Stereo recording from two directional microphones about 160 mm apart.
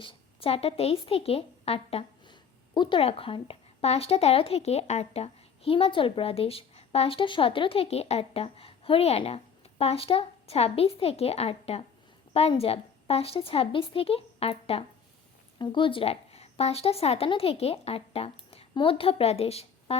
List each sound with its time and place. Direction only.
0.0 s a woman's voice: 35° left (ahead or behind)